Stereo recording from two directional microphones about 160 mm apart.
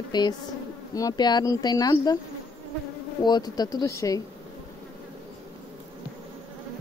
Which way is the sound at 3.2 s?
25° left (ahead or behind).